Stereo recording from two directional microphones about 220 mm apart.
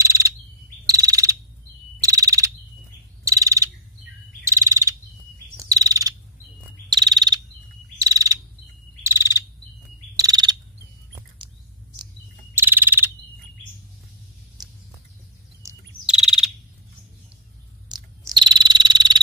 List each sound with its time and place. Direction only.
0.0 s bird vocalization: 15° right (ahead or behind)
0.8 s frog: 15° right (ahead or behind)
4.5 s bird vocalization: 15° right (ahead or behind)
5.6 s chirp: 15° right (ahead or behind)
6.9 s frog: 15° right (ahead or behind)
9.0 s insect: 10° right (ahead or behind)
10.1 s frog: 15° right (ahead or behind)
12.5 s frog: 10° right (ahead or behind)
15.6 s bird vocalization: 15° right (ahead or behind)
16.1 s frog: 5° right (ahead or behind)
17.8 s frog: 20° right (ahead or behind)